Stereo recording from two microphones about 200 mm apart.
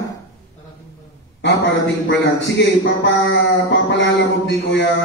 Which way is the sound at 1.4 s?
60° left (ahead or behind).